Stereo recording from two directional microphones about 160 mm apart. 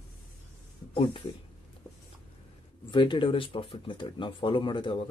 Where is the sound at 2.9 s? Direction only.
30° left (ahead or behind).